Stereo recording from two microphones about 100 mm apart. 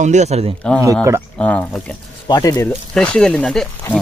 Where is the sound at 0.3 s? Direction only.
90° right.